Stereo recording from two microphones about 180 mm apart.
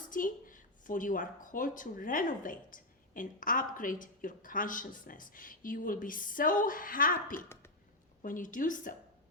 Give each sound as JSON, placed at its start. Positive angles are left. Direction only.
{"t": 0.1, "sound": "a woman's voice", "side_deg": 50}
{"t": 7.3, "sound": "speech", "side_deg": 15}
{"t": 8.2, "sound": "a woman's voice", "side_deg": 45}